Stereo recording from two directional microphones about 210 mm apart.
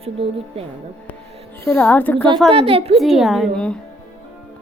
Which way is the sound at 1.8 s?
10° left (ahead or behind).